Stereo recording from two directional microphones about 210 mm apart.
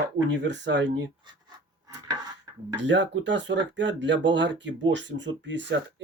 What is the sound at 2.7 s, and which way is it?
Speech, 60° right (ahead or behind).